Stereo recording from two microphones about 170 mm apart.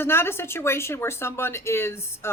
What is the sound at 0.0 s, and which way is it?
Speech, 15° left (ahead or behind).